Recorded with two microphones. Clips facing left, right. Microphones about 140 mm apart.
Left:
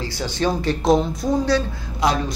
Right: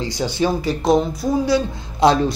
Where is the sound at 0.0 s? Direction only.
15° right (ahead or behind).